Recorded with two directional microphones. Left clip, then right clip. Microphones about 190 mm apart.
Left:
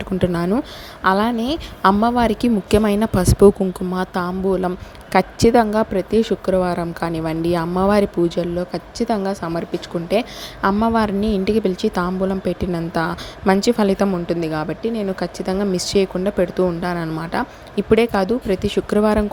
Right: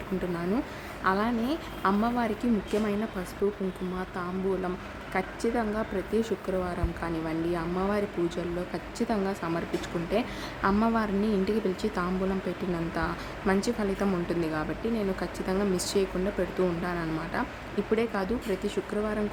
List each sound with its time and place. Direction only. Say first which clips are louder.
0.1 s speech: left 11 dB; 30° left (ahead or behind)